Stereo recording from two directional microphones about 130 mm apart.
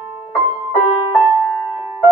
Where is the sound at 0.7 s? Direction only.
15° right (ahead or behind).